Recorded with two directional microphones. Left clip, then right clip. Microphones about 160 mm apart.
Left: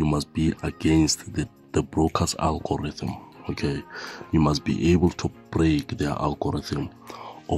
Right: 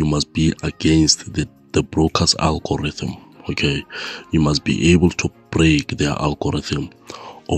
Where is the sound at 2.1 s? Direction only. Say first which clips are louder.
Right 7 dB; 30° right (ahead or behind).